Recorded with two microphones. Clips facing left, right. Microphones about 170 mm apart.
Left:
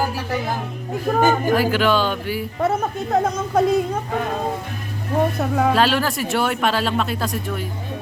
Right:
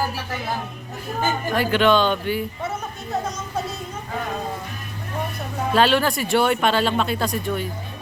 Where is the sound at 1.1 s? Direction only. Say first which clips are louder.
Left 9 dB; 65° left (ahead or behind).